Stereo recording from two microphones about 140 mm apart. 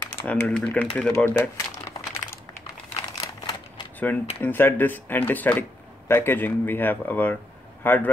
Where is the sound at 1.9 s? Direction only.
25° left (ahead or behind).